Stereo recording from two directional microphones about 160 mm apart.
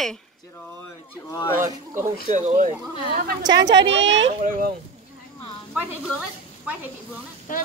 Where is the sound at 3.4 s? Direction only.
25° right (ahead or behind).